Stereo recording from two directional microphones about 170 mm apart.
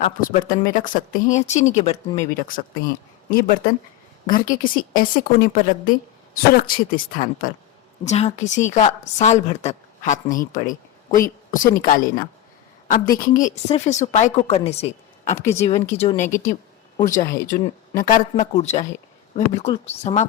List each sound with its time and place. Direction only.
0.0 s a woman's voice: 55° left (ahead or behind)
2.5 s a woman's voice: 55° left (ahead or behind)
8.0 s a woman's voice: 40° left (ahead or behind)
13.7 s a woman's voice: 40° left (ahead or behind)
15.4 s speech: 15° left (ahead or behind)
15.6 s a woman's voice: 40° left (ahead or behind)
17.2 s a woman's voice: 60° left (ahead or behind)
18.5 s a woman's voice: 40° left (ahead or behind)